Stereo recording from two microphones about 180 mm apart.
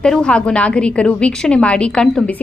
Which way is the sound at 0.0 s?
5° left (ahead or behind).